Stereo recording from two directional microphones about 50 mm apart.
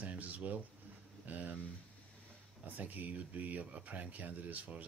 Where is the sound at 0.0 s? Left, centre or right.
Right.